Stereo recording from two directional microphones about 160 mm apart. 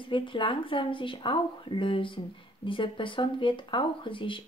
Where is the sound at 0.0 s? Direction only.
30° left (ahead or behind).